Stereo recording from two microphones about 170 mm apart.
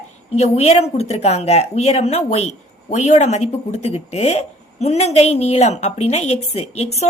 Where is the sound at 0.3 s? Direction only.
40° left (ahead or behind).